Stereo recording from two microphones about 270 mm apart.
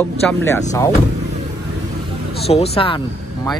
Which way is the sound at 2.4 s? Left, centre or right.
Left.